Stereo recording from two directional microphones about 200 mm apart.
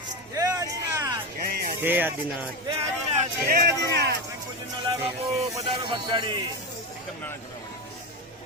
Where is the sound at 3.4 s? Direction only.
50° right (ahead or behind).